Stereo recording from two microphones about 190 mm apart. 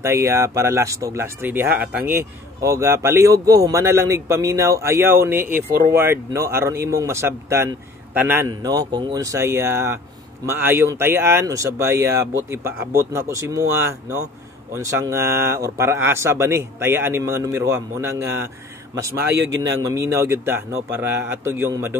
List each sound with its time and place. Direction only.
0.0 s speech: 15° right (ahead or behind)
8.5 s speech: 20° right (ahead or behind)
19.6 s speech: 15° right (ahead or behind)